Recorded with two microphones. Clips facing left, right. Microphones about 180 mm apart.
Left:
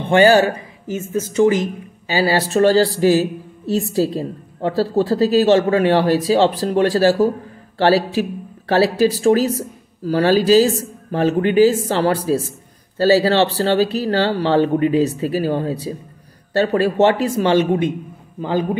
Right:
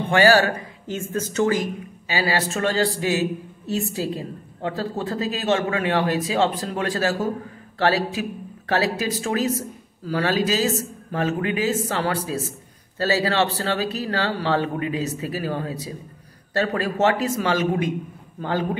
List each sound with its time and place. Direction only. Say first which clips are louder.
0.0 s speech: left 5 dB; 25° left (ahead or behind)
0.8 s speech: left 5 dB; 10° left (ahead or behind)
2.0 s a woman's voice: left 6 dB; 30° left (ahead or behind)
18.4 s speech: left 5 dB; 15° left (ahead or behind)